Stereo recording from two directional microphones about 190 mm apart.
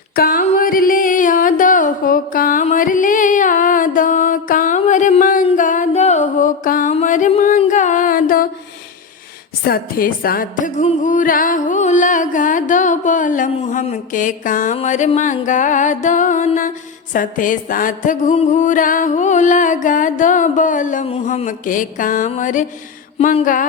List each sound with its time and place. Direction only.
0.2 s a woman's voice: 50° left (ahead or behind)
0.4 s a sound: 45° left (ahead or behind)
6.9 s music: 40° left (ahead or behind)
9.6 s a woman's voice: 50° left (ahead or behind)